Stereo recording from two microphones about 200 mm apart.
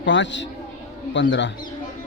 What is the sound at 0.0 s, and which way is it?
Speech, 65° left (ahead or behind).